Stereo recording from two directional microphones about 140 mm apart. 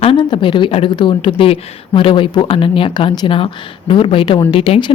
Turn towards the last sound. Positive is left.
turn(degrees=40)  # may be behind; listen again after turning